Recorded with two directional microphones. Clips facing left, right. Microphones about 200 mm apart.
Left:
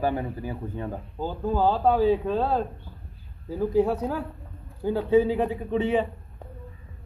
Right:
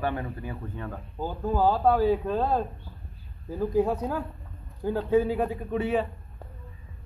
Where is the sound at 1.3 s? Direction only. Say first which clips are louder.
Left 1 dB; 10° right (ahead or behind).